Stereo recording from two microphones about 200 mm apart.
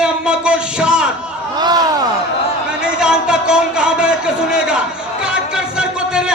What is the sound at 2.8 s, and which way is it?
Speech, 5° right (ahead or behind).